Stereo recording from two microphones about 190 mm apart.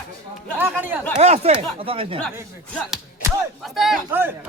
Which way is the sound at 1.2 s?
35° right (ahead or behind).